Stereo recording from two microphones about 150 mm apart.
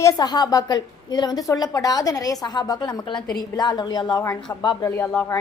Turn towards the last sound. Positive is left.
turn(degrees=20)  # may be behind; listen again after turning